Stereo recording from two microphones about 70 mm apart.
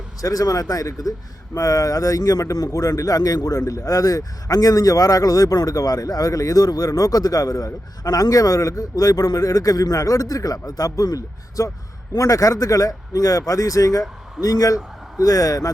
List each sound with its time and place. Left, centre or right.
0.2 s a man's voice: left